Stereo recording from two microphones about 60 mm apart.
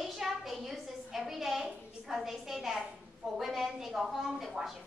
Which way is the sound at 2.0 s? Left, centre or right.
Centre.